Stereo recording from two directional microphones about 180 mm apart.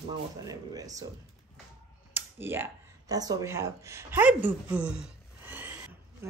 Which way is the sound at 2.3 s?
10° right (ahead or behind).